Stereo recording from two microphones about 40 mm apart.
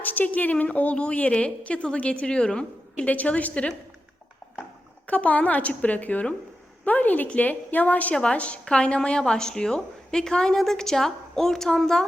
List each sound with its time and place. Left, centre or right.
0.0 s a woman's voice: left
3.1 s a woman's voice: left
5.0 s a woman's voice: left
8.1 s a woman's voice: left